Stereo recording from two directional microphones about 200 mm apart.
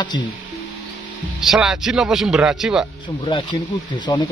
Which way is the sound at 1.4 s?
Centre (ahead or behind).